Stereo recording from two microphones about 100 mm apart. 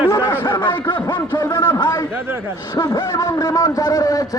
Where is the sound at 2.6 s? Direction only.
45° left (ahead or behind).